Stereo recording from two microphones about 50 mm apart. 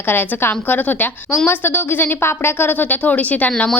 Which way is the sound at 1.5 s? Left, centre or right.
Left.